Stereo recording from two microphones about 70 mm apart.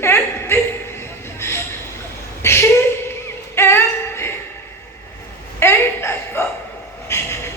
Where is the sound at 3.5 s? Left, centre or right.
Left.